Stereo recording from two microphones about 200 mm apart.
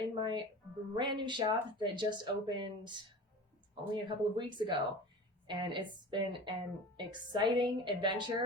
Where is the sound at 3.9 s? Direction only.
25° right (ahead or behind).